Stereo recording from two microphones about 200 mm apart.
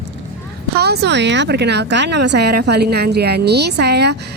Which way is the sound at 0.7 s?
55° right (ahead or behind).